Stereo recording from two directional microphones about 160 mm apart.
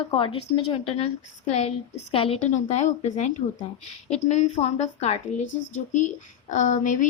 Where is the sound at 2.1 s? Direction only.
40° left (ahead or behind).